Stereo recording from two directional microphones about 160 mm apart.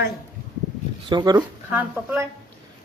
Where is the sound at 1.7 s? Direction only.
10° right (ahead or behind).